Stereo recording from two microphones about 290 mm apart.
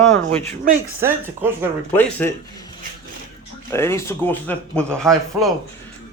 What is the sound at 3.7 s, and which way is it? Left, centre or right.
A man's voice, centre.